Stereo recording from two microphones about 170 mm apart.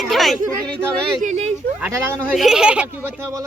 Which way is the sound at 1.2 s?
45° right (ahead or behind).